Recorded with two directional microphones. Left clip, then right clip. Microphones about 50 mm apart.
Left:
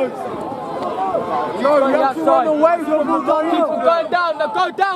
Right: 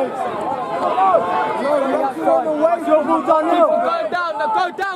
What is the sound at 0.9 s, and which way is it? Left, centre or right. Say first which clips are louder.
Speech: right 5 dB; right.